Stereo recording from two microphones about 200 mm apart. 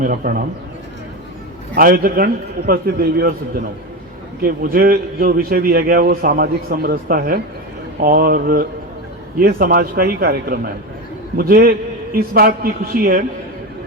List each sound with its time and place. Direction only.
0.0 s a man's voice: 45° right (ahead or behind)
1.7 s a man's voice: 45° right (ahead or behind)
4.4 s a man's voice: 45° right (ahead or behind)